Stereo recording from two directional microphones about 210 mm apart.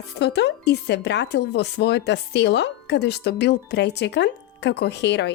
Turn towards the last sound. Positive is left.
turn(degrees=55)  # may be behind; listen again after turning